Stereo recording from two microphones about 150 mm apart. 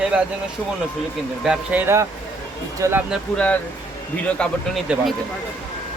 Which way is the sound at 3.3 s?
10° left (ahead or behind).